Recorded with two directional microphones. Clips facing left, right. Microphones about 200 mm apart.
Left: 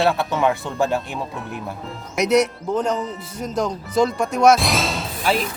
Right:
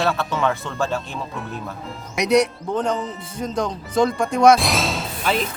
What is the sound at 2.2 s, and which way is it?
Speech, 5° left (ahead or behind).